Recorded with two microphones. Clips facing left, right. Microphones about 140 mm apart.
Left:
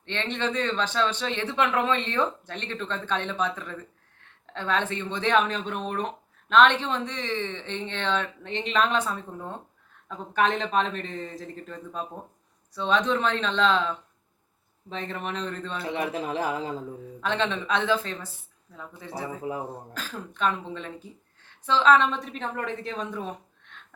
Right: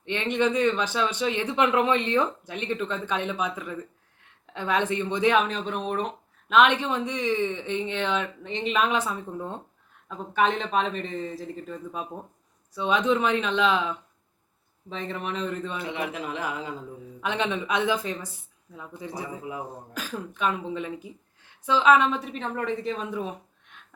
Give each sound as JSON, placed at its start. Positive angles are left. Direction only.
{"t": 0.0, "sound": "speech", "side_deg": -10}
{"t": 10.1, "sound": "speech", "side_deg": 0}
{"t": 15.8, "sound": "a man's voice", "side_deg": 35}
{"t": 17.2, "sound": "speech", "side_deg": -10}
{"t": 19.5, "sound": "a man's voice", "side_deg": 40}
{"t": 19.9, "sound": "speech", "side_deg": -15}